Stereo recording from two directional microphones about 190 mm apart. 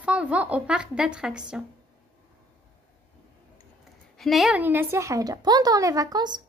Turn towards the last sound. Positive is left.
turn(degrees=-20)  # may be behind; listen again after turning